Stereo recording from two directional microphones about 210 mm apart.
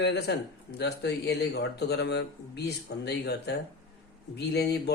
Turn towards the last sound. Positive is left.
turn(degrees=50)  # may be behind; listen again after turning